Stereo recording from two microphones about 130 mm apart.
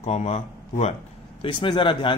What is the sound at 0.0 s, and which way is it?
Speech, 55° left (ahead or behind).